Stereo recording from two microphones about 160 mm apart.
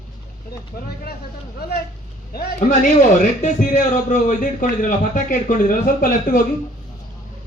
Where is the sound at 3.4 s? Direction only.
50° left (ahead or behind).